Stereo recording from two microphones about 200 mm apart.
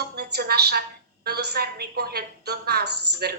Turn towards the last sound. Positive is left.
turn(degrees=-55)  # may be behind; listen again after turning